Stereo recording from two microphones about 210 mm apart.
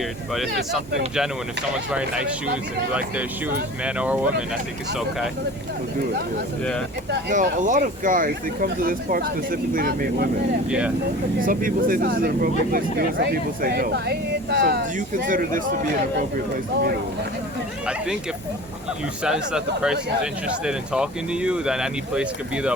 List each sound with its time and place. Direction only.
0.7 s speech: centre (ahead or behind)
7.1 s speech: 45° right (ahead or behind)
10.7 s speech: 5° right (ahead or behind)
11.3 s speech: 40° right (ahead or behind)
19.2 s speech: 5° right (ahead or behind)